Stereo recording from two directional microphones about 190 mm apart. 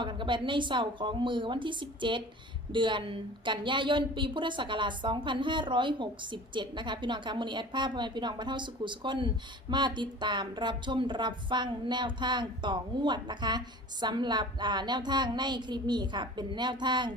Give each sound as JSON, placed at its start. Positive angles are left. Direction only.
{"t": 0.0, "sound": "a woman's voice", "side_deg": -25}